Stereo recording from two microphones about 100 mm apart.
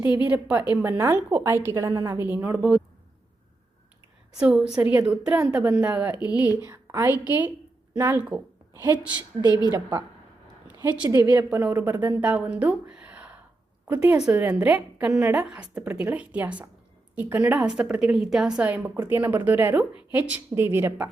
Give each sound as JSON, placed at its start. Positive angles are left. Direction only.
{"t": 0.3, "sound": "a woman's voice", "side_deg": -15}
{"t": 2.1, "sound": "a woman's voice", "side_deg": -20}
{"t": 2.6, "sound": "speech", "side_deg": -10}
{"t": 4.4, "sound": "speech", "side_deg": -10}
{"t": 4.8, "sound": "a woman's voice", "side_deg": -20}
{"t": 9.4, "sound": "a woman's voice", "side_deg": 40}
{"t": 11.1, "sound": "a woman's voice", "side_deg": -35}
{"t": 11.5, "sound": "a woman's voice", "side_deg": -20}
{"t": 12.2, "sound": "a woman's voice", "side_deg": -15}